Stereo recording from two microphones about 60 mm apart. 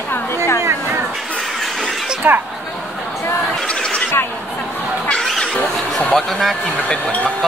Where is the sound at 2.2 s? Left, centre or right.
Right.